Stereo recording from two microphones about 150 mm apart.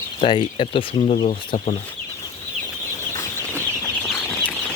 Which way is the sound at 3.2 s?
15° left (ahead or behind).